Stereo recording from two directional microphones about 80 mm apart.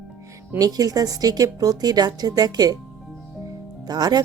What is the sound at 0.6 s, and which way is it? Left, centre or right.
A woman's voice, right.